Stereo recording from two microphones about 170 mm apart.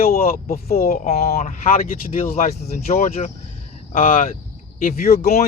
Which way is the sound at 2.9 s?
40° left (ahead or behind).